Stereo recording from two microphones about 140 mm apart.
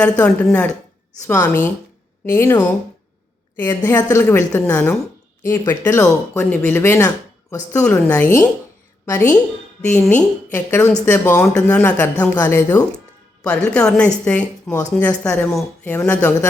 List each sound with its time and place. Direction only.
0.0 s a woman's voice: 10° left (ahead or behind)